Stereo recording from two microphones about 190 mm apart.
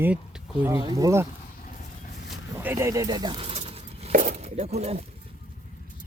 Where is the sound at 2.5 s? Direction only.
15° right (ahead or behind); by 4.1 s 30° right (ahead or behind).